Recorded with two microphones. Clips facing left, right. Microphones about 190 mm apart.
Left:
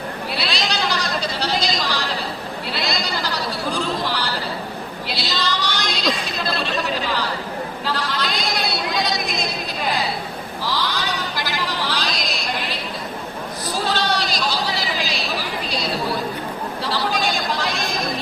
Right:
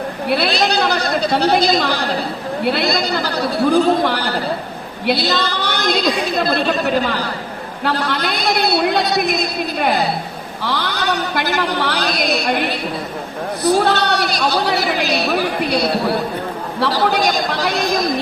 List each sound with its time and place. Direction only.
0.3 s a woman's voice: 60° right (ahead or behind)